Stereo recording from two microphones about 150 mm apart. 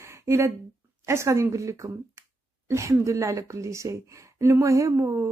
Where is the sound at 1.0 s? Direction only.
20° right (ahead or behind).